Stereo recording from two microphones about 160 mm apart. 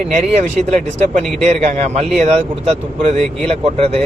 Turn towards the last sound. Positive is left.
turn(degrees=-40)  # may be behind; listen again after turning